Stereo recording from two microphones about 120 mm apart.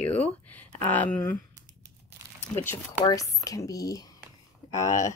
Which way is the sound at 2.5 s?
20° left (ahead or behind).